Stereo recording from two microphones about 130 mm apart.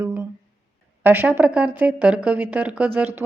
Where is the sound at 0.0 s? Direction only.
15° right (ahead or behind).